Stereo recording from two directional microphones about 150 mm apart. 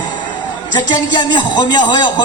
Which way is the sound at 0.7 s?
30° left (ahead or behind).